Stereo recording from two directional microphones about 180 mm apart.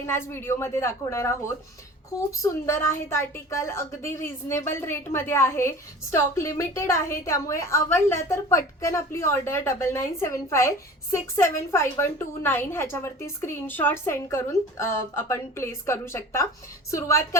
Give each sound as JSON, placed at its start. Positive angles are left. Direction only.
{"t": 0.0, "sound": "a woman's voice", "side_deg": 15}